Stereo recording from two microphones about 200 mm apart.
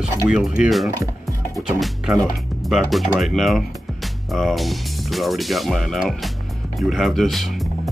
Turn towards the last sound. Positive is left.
turn(degrees=0)  # may be behind; listen again after turning